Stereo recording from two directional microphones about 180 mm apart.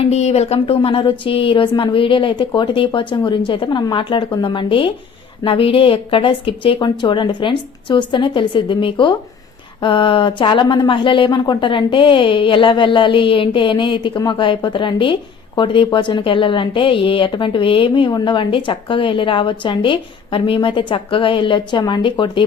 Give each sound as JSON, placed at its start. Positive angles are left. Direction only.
{"t": 0.0, "sound": "speech", "side_deg": 35}